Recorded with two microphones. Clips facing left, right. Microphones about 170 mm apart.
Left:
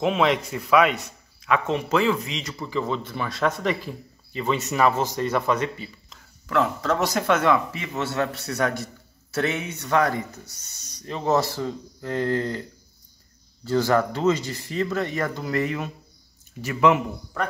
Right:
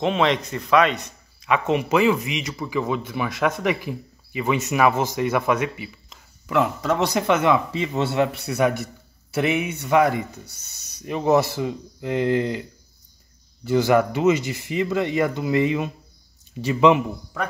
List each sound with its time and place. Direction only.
0.0 s a man's voice: 5° left (ahead or behind)
1.5 s a man's voice: 10° right (ahead or behind); by 8.1 s 25° right (ahead or behind)
8.2 s a man's voice: 15° right (ahead or behind)
13.7 s a man's voice: 15° right (ahead or behind)